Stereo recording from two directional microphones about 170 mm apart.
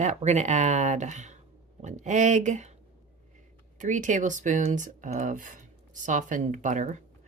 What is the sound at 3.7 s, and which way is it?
Speech, 50° right (ahead or behind).